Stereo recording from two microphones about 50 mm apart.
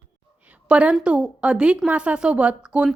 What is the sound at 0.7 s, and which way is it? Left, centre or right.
A woman's voice, right.